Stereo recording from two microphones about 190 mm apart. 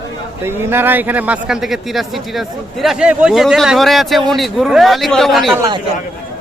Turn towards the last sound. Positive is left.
turn(degrees=-20)  # may be behind; listen again after turning